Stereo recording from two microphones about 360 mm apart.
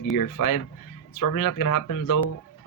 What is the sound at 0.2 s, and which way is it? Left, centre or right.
Speech, left.